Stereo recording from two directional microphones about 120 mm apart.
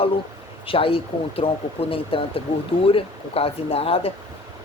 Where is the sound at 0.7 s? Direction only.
50° left (ahead or behind).